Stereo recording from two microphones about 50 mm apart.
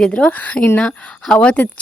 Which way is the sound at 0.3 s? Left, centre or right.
Left.